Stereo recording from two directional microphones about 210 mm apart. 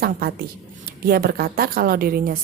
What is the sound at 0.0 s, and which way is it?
A woman's voice, 45° right (ahead or behind).